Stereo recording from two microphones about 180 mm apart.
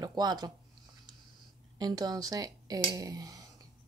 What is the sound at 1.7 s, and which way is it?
Speech, 20° right (ahead or behind).